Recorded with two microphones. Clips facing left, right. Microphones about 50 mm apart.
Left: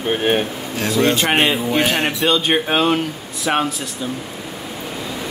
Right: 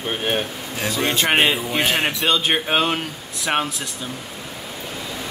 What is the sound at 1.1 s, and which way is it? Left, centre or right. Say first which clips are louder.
Speech: left 1 dB; centre.